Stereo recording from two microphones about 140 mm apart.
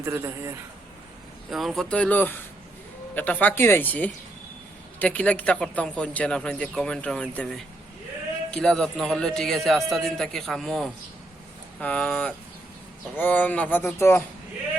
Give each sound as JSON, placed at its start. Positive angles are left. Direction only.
{"t": 0.0, "sound": "a man's voice", "side_deg": -20}
{"t": 1.5, "sound": "speech", "side_deg": 0}